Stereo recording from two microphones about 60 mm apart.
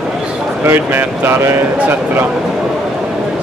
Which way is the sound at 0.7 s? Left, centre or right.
Right.